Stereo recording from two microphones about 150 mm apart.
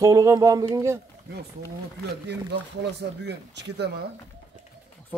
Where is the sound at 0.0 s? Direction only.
20° right (ahead or behind).